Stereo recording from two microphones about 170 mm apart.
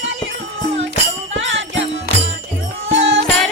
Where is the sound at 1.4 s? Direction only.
90° right.